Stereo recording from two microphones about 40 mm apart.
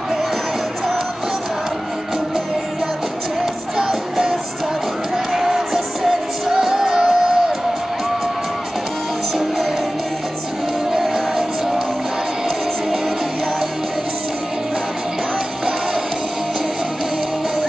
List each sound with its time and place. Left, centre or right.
3.7 s music: centre
10.9 s music: centre